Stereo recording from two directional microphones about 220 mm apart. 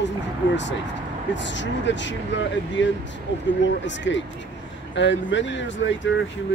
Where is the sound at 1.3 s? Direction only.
55° left (ahead or behind).